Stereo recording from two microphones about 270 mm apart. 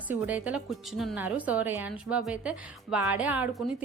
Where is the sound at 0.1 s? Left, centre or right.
Centre.